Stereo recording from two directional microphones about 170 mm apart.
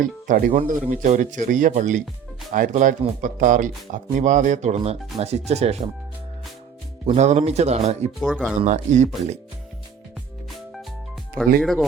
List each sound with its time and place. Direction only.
0.0 s speech: 55° right (ahead or behind); by 5.9 s 40° right (ahead or behind)
7.1 s speech: 40° right (ahead or behind)
8.2 s speech: centre (ahead or behind)
8.6 s speech: 45° right (ahead or behind)
11.6 s speech: centre (ahead or behind)